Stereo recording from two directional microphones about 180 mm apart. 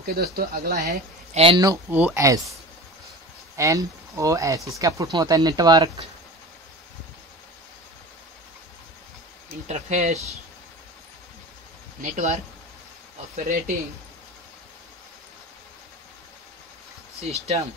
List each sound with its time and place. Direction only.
0.0 s speech: 55° right (ahead or behind)
1.3 s speech: 30° right (ahead or behind)
1.6 s speech: 20° right (ahead or behind)
3.5 s speech: 15° right (ahead or behind)
9.7 s speech: 40° right (ahead or behind)
12.0 s speech: 40° right (ahead or behind)
13.4 s speech: 45° right (ahead or behind)
17.2 s speech: 35° right (ahead or behind)